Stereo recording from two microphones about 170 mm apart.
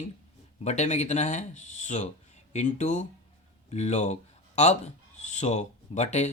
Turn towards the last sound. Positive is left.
turn(degrees=40)  # may be behind; listen again after turning